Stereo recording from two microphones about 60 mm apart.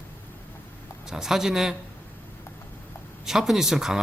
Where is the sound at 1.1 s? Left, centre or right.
Centre.